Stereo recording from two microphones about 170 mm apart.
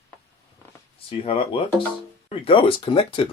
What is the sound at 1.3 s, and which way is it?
Speech, 30° left (ahead or behind).